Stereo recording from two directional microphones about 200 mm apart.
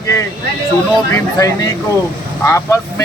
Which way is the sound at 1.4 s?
15° left (ahead or behind).